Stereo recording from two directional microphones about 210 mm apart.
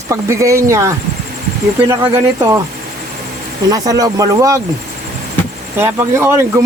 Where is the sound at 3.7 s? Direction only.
20° right (ahead or behind).